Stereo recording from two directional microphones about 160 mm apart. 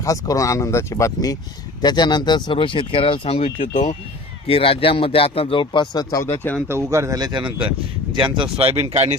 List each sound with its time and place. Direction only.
0.0 s speech: 20° left (ahead or behind)
6.7 s speech: 15° right (ahead or behind); by 9.1 s 40° right (ahead or behind)